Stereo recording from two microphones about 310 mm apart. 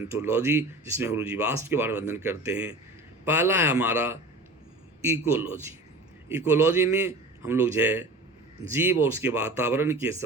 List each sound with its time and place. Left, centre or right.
0.0 s speech: centre